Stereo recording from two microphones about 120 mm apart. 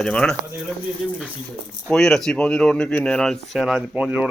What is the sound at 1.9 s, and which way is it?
Speech, 5° left (ahead or behind).